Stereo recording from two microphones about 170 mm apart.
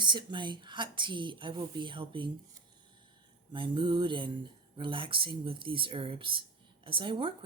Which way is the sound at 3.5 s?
30° right (ahead or behind).